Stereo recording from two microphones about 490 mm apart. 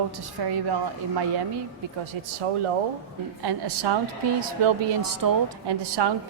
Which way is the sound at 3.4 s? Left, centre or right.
Right.